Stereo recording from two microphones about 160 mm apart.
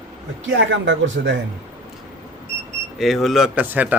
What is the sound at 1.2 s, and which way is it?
Speech, 70° right (ahead or behind).